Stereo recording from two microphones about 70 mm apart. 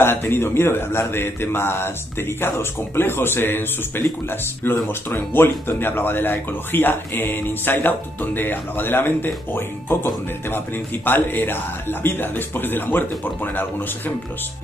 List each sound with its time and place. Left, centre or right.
0.0 s a man's voice: left